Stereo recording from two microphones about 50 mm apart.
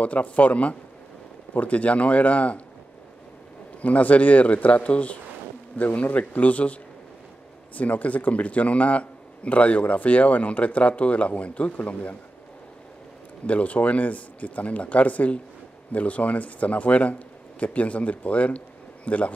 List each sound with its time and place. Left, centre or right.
0.0 s speech: left
3.8 s speech: left
13.5 s speech: left